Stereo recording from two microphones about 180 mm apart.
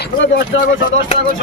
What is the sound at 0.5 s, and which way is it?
Speech, 90° left.